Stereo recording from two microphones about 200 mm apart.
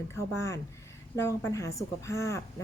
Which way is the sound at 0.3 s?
15° left (ahead or behind).